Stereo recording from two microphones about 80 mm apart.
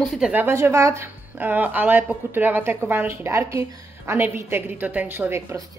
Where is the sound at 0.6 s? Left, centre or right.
Right.